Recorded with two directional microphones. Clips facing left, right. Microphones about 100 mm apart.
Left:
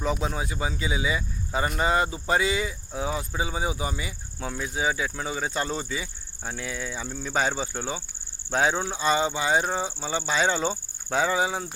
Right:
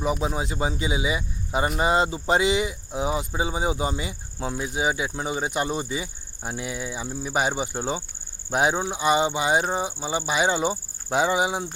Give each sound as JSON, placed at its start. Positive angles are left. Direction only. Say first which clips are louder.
{"t": 0.0, "sound": "speech", "louder": "right 2 dB", "side_deg": -10}